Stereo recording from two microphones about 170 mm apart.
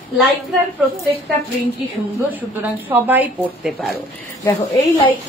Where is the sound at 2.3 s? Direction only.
10° right (ahead or behind).